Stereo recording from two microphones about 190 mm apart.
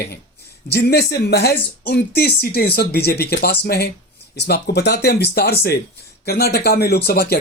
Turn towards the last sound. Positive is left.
turn(degrees=55)  # may be behind; listen again after turning